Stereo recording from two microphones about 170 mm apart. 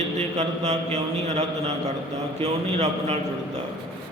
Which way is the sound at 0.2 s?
40° right (ahead or behind).